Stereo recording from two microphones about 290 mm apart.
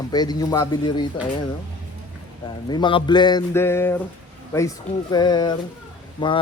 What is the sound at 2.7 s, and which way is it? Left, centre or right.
Speech, centre.